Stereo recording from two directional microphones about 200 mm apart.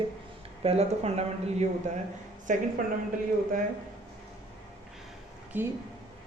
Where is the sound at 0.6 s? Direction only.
30° right (ahead or behind).